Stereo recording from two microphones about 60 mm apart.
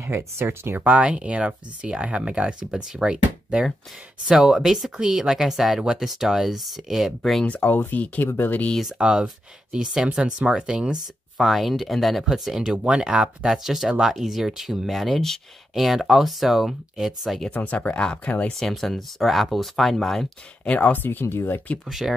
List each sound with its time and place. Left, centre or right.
0.0 s speech: right
0.7 s speech: right; by 7.4 s centre
7.4 s speech: left
8.8 s speech: centre
11.3 s speech: centre
17.5 s speech: left
18.6 s speech: centre
20.6 s speech: left
20.9 s speech: left
21.8 s speech: centre